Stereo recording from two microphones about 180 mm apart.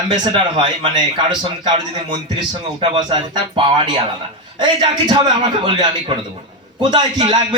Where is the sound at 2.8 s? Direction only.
25° right (ahead or behind).